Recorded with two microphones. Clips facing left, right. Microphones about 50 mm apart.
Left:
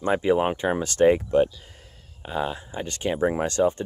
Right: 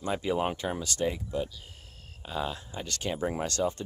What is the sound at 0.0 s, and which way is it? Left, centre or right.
Speech, left.